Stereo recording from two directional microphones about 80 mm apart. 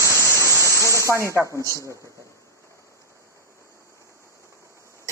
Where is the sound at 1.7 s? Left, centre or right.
Right.